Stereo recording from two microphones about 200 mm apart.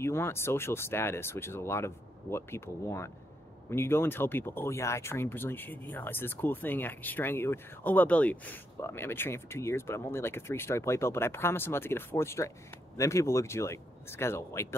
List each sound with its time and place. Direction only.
0.0 s speech: 10° left (ahead or behind)